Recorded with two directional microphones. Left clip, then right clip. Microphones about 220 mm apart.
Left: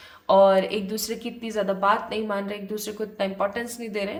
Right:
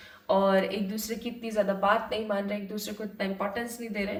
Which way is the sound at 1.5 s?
30° left (ahead or behind).